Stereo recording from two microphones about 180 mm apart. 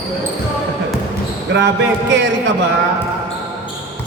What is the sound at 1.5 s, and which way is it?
Speech, 80° right.